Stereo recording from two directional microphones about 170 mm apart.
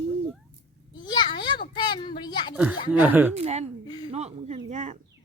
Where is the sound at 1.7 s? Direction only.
25° left (ahead or behind).